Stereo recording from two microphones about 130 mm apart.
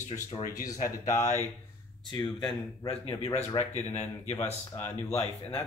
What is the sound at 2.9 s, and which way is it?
Speech, 50° left (ahead or behind).